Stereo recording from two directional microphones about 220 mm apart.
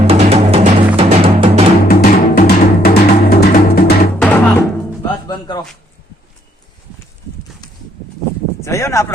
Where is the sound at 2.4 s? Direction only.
45° left (ahead or behind).